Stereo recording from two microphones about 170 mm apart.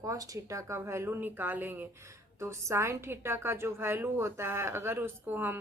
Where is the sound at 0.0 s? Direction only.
20° right (ahead or behind).